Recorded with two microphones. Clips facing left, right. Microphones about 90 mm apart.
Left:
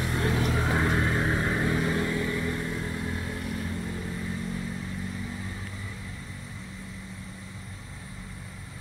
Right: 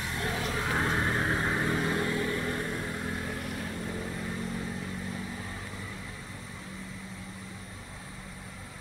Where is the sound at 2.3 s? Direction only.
35° right (ahead or behind).